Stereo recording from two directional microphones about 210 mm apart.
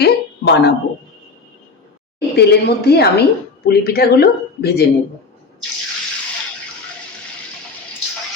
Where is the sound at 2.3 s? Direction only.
50° left (ahead or behind).